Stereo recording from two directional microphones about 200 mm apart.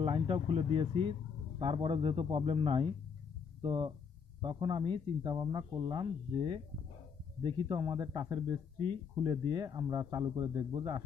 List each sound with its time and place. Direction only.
0.0 s a man's voice: 25° right (ahead or behind)